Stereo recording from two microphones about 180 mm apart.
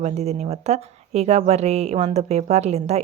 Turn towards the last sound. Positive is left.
turn(degrees=-35)  # may be behind; listen again after turning